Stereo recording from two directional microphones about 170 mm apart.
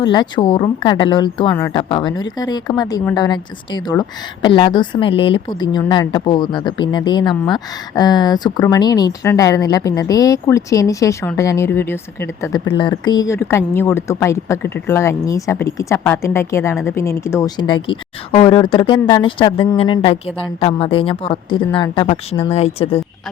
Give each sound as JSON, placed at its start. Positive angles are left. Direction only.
{"t": 0.0, "sound": "a woman's voice", "side_deg": 25}
{"t": 1.8, "sound": "a woman's voice", "side_deg": 30}
{"t": 12.7, "sound": "a woman's voice", "side_deg": 25}
{"t": 17.8, "sound": "speech", "side_deg": 30}